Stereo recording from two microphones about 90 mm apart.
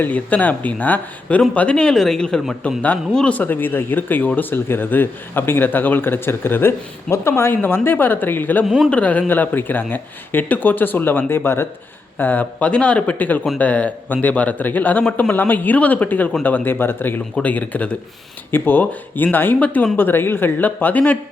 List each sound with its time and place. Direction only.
0.0 s a man's voice: 15° left (ahead or behind)